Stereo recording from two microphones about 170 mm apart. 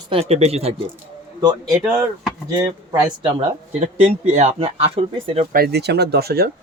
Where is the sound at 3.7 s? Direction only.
40° right (ahead or behind).